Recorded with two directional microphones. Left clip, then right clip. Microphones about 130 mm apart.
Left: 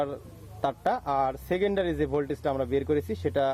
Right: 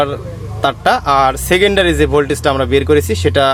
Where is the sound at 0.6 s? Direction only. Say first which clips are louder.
Right 14 dB; 65° left (ahead or behind).